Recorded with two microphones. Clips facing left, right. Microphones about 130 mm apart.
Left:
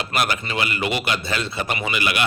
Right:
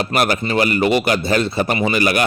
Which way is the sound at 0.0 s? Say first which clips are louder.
Right 6 dB; 45° right (ahead or behind).